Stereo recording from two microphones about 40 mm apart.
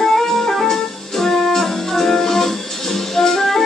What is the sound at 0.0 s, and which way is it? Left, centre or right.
Music, centre.